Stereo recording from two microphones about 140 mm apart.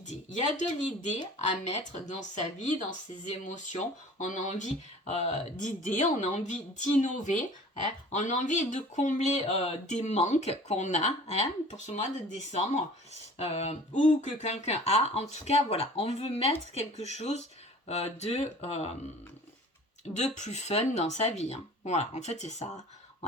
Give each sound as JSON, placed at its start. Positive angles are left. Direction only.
{"t": 0.0, "sound": "speech", "side_deg": 60}
{"t": 3.4, "sound": "speech", "side_deg": 60}
{"t": 20.1, "sound": "speech", "side_deg": 55}